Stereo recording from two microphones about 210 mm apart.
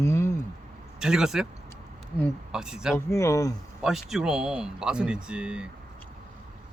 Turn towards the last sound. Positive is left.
turn(degrees=-5)  # may be behind; listen again after turning